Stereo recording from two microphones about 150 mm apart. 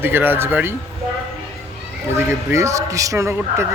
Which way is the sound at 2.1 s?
15° right (ahead or behind).